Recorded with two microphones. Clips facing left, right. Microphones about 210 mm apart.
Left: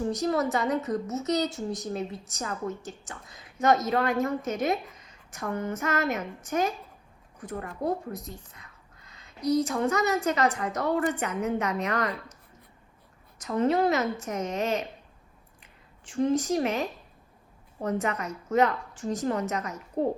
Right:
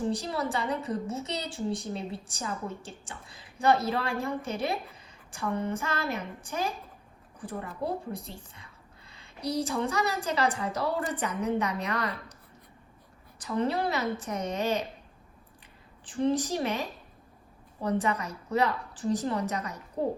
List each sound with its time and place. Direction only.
0.1 s a woman's voice: 30° right (ahead or behind)
13.4 s a woman's voice: 35° right (ahead or behind)
17.8 s a woman's voice: 35° right (ahead or behind)